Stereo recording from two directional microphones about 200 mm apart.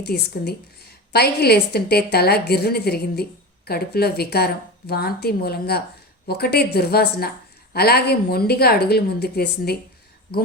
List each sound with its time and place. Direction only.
0.0 s a woman's voice: 55° left (ahead or behind)